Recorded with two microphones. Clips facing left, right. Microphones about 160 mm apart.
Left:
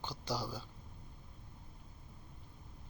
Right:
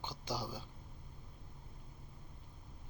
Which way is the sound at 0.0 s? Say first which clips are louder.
Left 2 dB; 15° right (ahead or behind).